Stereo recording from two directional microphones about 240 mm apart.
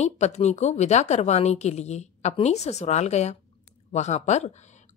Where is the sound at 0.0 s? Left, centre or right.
Left.